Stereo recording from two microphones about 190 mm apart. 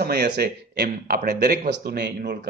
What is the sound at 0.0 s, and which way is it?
Speech, 55° right (ahead or behind).